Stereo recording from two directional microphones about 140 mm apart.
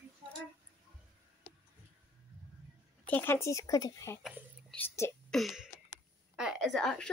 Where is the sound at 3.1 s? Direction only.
15° left (ahead or behind).